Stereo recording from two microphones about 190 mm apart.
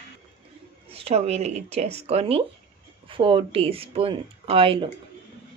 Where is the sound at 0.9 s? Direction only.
30° right (ahead or behind).